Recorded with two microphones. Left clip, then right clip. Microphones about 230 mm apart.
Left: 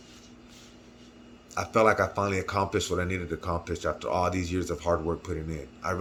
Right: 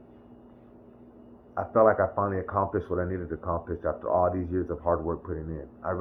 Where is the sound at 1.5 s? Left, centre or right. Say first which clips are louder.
Right 1 dB; left.